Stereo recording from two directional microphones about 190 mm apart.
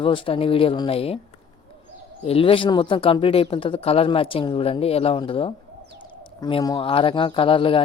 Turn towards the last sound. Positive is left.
turn(degrees=25)  # may be behind; listen again after turning